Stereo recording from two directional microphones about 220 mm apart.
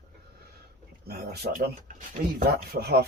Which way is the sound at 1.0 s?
45° right (ahead or behind).